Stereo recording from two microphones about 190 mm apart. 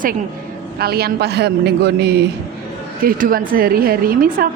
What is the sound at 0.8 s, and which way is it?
A man's voice, 55° right (ahead or behind).